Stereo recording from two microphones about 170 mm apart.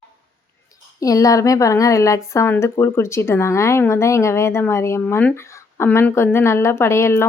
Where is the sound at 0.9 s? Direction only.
20° left (ahead or behind).